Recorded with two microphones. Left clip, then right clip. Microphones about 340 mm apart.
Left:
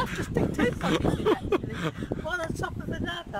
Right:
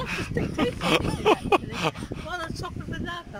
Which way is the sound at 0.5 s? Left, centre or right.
Centre.